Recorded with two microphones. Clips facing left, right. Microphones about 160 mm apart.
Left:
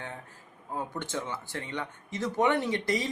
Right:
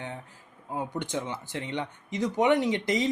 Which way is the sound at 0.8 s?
15° right (ahead or behind).